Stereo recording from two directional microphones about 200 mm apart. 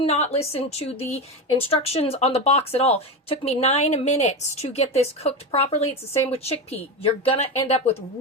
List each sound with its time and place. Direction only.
0.0 s speech: 30° left (ahead or behind)